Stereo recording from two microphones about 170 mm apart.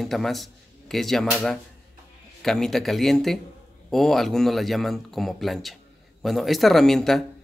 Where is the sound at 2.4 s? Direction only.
Centre (ahead or behind).